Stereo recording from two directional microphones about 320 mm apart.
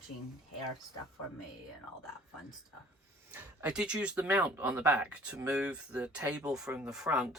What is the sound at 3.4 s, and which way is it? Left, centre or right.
Speech, centre.